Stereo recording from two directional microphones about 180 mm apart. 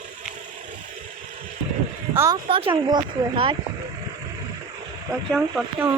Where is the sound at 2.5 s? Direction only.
30° right (ahead or behind).